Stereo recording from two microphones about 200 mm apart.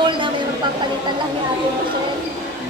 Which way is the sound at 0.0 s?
25° right (ahead or behind).